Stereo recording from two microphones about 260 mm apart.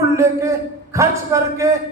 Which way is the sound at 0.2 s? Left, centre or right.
Centre.